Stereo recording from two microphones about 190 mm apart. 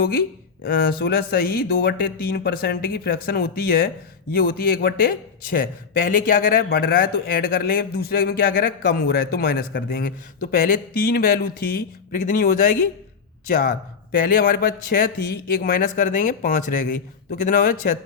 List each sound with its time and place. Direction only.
0.6 s speech: 50° left (ahead or behind)